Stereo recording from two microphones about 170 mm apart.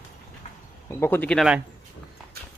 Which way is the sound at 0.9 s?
15° left (ahead or behind).